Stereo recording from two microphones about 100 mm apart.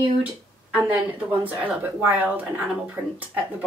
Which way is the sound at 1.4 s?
15° right (ahead or behind).